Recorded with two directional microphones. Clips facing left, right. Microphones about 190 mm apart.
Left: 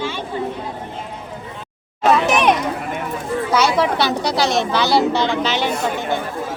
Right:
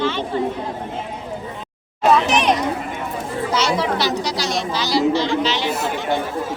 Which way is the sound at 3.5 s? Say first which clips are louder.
Left 3 dB; 55° left (ahead or behind).